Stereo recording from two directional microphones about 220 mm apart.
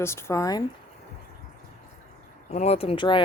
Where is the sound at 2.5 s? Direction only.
30° left (ahead or behind).